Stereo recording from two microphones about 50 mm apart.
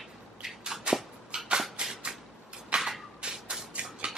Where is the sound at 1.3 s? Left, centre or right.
Centre.